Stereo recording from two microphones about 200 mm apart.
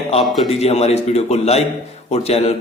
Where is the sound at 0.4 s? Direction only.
30° left (ahead or behind).